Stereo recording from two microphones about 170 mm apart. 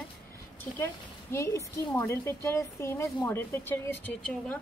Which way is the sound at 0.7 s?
15° left (ahead or behind).